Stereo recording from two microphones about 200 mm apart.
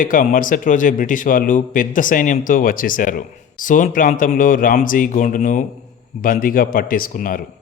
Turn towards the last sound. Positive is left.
turn(degrees=45)  # may be behind; listen again after turning